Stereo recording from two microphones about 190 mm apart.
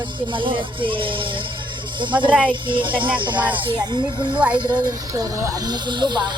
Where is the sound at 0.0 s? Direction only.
25° right (ahead or behind).